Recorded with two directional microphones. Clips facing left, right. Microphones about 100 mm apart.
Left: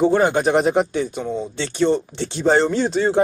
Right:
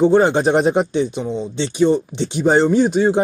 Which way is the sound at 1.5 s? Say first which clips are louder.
Right 4 dB; 15° right (ahead or behind).